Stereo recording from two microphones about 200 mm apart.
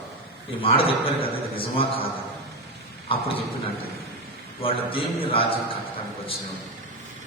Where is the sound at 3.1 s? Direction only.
25° left (ahead or behind).